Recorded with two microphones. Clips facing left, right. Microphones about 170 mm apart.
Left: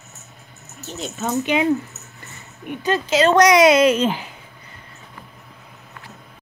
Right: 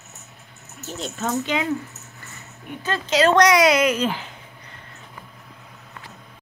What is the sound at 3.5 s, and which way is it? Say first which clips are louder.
Speech: left 4 dB; 25° left (ahead or behind).